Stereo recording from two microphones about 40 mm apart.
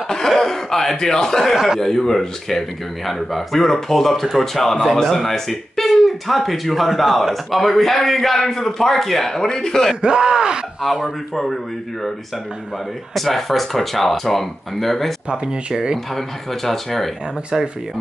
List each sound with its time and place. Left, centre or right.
0.4 s speech: centre
1.5 s speech: centre
1.8 s speech: centre
10.0 s speech: centre
10.8 s speech: centre
13.1 s speech: centre
15.3 s speech: centre
16.2 s speech: centre
17.5 s speech: centre